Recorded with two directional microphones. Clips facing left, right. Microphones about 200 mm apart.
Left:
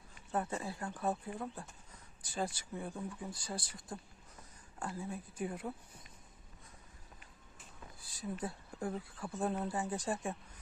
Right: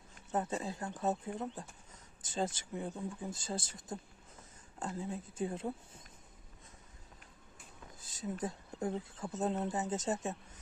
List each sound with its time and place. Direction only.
0.3 s speech: 20° right (ahead or behind)
8.0 s speech: 20° right (ahead or behind)